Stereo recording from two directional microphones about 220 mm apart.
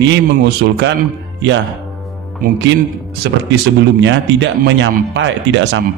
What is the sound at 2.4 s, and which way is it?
Speech, 40° right (ahead or behind).